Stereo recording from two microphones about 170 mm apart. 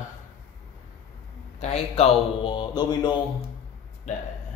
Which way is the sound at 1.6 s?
40° left (ahead or behind).